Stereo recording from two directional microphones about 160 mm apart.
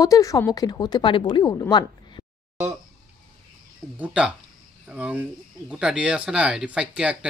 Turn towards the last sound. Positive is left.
turn(degrees=-5)  # may be behind; listen again after turning